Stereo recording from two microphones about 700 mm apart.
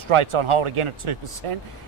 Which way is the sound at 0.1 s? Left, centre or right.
Right.